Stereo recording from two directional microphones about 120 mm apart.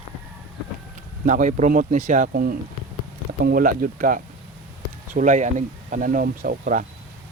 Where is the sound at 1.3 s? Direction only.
90° right.